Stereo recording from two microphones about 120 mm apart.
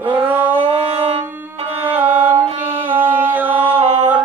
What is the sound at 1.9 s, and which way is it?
Music, 15° right (ahead or behind).